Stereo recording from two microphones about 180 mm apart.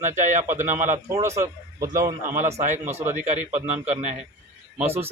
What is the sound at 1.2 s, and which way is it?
A man's voice, 15° right (ahead or behind).